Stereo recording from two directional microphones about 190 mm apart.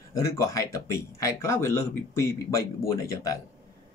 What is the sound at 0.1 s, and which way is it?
Speech, 15° left (ahead or behind).